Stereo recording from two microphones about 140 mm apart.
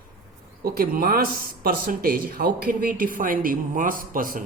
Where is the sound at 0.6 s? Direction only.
90° right.